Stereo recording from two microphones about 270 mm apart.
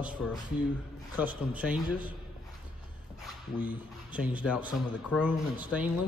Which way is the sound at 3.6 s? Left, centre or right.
Centre.